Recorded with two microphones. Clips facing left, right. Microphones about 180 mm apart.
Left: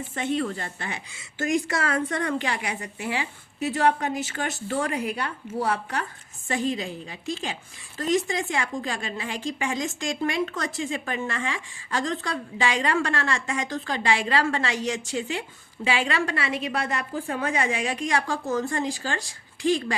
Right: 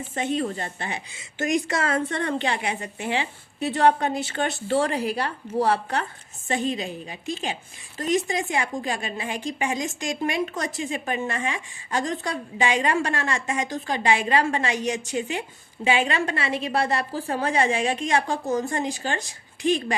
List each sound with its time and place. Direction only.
0.1 s a woman's voice: 20° right (ahead or behind)
6.5 s a woman's voice: 20° right (ahead or behind)